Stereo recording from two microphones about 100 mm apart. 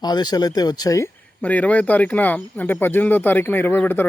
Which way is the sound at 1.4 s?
15° left (ahead or behind).